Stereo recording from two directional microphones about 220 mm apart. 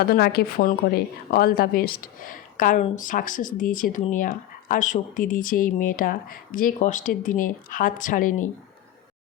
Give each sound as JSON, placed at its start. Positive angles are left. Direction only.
{"t": 0.0, "sound": "a woman's voice", "side_deg": 45}